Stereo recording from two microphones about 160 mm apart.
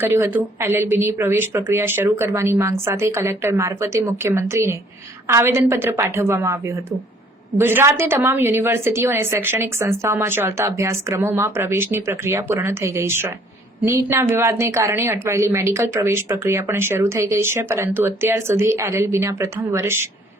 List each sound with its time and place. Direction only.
0.0 s a woman's voice: 15° right (ahead or behind)